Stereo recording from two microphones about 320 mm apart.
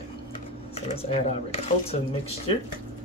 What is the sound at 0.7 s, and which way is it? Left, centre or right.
Speech, centre.